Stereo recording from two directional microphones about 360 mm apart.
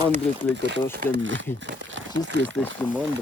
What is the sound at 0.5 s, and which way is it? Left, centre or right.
Speech, right.